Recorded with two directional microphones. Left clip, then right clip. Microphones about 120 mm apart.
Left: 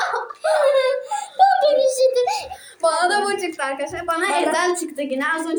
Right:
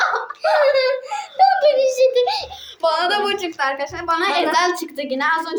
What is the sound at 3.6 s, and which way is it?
A woman's voice, 25° right (ahead or behind).